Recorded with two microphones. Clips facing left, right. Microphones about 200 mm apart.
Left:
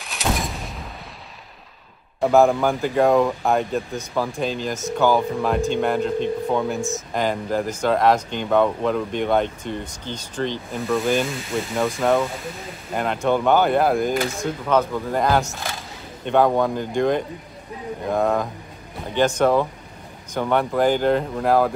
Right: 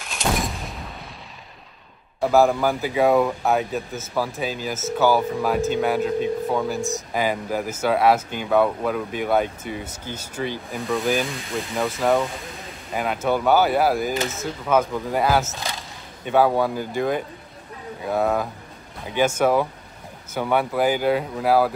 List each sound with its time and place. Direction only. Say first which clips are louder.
0.0 s artillery fire: even; centre (ahead or behind)
2.2 s speech: left 2 dB; centre (ahead or behind)